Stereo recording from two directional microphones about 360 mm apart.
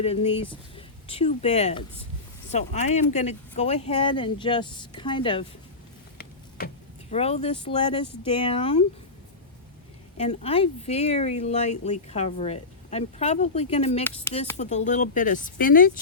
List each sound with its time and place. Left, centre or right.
0.0 s speech: centre
7.1 s speech: centre
10.2 s speech: centre